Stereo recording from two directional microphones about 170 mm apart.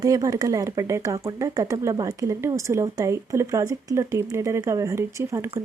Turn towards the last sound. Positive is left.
turn(degrees=-15)  # may be behind; listen again after turning